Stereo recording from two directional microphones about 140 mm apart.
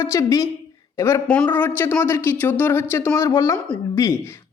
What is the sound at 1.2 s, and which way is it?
Speech, 10° left (ahead or behind).